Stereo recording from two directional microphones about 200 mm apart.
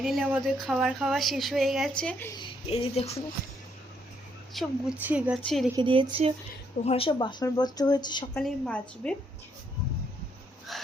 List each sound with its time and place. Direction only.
0.0 s a woman's voice: centre (ahead or behind)
2.4 s speech: 30° left (ahead or behind)
4.5 s a woman's voice: 5° right (ahead or behind)
5.7 s a woman's voice: 25° right (ahead or behind)
6.8 s speech: 30° left (ahead or behind)
8.3 s a woman's voice: 5° left (ahead or behind)
10.7 s music: centre (ahead or behind)